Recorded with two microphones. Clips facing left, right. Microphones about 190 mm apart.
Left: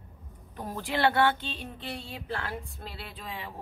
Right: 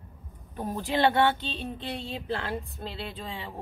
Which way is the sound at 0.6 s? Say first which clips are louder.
Right 3 dB; 20° right (ahead or behind).